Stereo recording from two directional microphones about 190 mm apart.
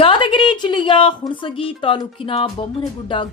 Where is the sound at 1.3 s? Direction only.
25° left (ahead or behind).